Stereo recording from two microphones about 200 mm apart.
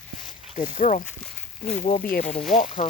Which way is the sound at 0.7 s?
40° left (ahead or behind).